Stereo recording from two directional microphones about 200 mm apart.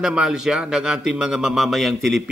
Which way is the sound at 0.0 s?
5° right (ahead or behind).